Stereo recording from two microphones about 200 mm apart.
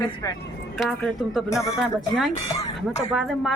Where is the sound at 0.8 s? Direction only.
Centre (ahead or behind).